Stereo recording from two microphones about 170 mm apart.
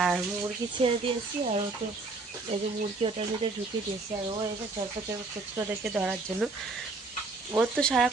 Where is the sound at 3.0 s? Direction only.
30° right (ahead or behind).